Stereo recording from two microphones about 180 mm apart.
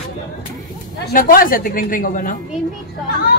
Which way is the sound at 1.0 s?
50° left (ahead or behind).